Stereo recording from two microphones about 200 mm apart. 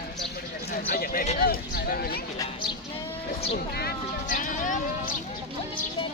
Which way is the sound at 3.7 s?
50° left (ahead or behind).